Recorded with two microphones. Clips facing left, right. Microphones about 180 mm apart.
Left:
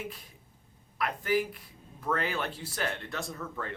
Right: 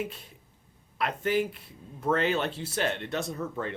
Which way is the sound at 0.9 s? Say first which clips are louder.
Right 2 dB; 25° right (ahead or behind).